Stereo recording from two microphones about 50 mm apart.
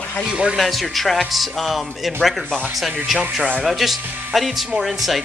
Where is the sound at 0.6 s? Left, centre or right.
Centre.